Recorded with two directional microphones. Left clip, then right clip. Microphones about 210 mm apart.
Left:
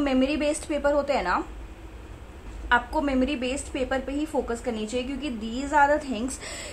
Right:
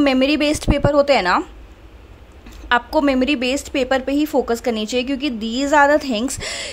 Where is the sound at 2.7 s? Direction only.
45° right (ahead or behind).